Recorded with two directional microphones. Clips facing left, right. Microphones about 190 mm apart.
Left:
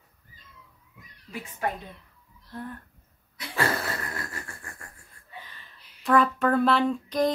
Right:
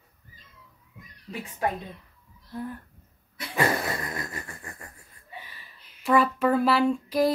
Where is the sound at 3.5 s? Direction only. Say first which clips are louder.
Right 2 dB; 20° right (ahead or behind).